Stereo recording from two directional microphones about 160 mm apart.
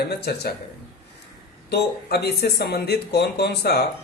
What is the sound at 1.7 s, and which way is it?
Speech, 90° left.